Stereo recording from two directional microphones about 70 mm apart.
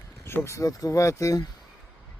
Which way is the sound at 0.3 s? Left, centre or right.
Left.